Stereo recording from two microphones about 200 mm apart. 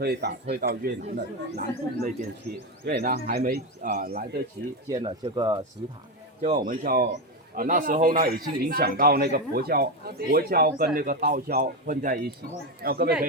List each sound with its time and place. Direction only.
0.0 s speech: 55° right (ahead or behind)
2.8 s speech: 45° right (ahead or behind)
4.9 s speech: 20° right (ahead or behind)
6.4 s speech: 40° right (ahead or behind)